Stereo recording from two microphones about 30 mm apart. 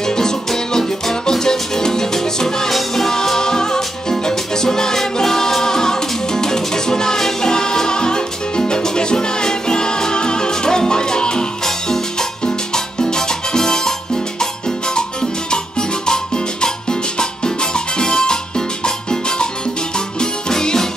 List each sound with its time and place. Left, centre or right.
0.0 s music: centre
11.6 s salsa music: centre
17.2 s music: left